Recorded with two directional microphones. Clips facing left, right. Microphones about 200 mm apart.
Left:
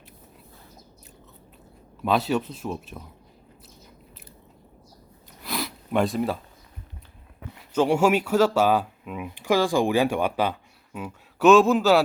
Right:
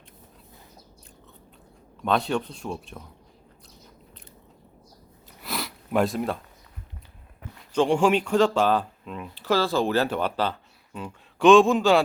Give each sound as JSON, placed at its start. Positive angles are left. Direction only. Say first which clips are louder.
{"t": 2.0, "sound": "speech", "louder": "left 1 dB", "side_deg": 5}
{"t": 5.4, "sound": "sniff", "louder": "left 2 dB", "side_deg": 0}
{"t": 7.7, "sound": "speech", "louder": "even", "side_deg": 5}